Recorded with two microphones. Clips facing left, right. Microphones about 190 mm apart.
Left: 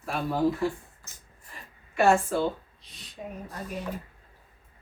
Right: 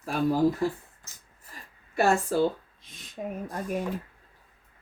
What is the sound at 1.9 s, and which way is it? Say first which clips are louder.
Speech: left 1 dB; 35° right (ahead or behind).